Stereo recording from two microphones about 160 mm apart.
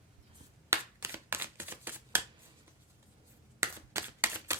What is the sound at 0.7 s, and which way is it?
Shuffling cards, 15° right (ahead or behind).